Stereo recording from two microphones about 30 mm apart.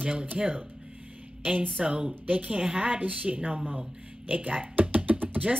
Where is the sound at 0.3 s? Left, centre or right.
Right.